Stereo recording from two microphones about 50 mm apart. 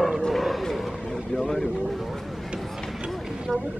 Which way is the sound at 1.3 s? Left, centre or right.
Centre.